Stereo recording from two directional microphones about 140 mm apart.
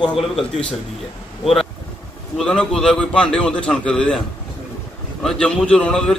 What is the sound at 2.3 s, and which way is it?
A man's voice, 5° left (ahead or behind).